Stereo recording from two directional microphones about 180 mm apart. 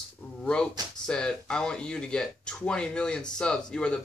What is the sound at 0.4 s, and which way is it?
Speech, 5° left (ahead or behind).